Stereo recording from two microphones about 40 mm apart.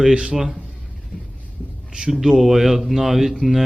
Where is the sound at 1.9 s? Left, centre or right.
Centre.